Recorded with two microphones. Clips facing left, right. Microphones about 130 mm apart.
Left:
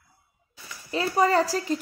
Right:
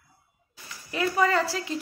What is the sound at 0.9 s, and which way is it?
Speech, 35° left (ahead or behind).